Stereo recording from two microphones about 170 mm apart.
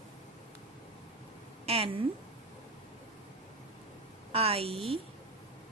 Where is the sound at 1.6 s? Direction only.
35° right (ahead or behind).